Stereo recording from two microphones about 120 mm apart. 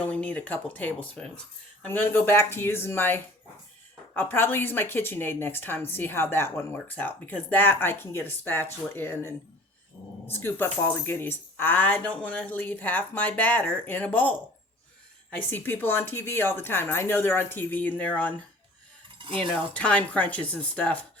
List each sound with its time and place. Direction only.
0.0 s speech: 10° left (ahead or behind)
15.4 s speech: 15° left (ahead or behind)
19.2 s cutlery: 45° right (ahead or behind)
19.7 s speech: 10° left (ahead or behind)